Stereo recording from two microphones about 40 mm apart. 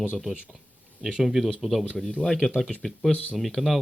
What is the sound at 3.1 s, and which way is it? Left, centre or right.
Speech, left.